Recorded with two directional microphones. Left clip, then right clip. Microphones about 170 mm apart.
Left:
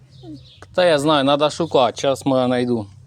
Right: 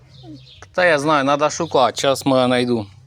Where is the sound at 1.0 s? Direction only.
30° left (ahead or behind).